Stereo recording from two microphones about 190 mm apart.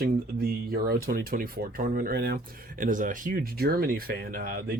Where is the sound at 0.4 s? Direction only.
50° right (ahead or behind).